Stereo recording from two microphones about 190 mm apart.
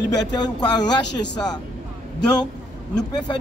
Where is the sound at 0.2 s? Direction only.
20° left (ahead or behind).